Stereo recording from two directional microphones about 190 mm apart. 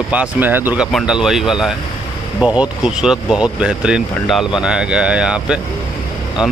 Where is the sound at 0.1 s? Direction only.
10° right (ahead or behind).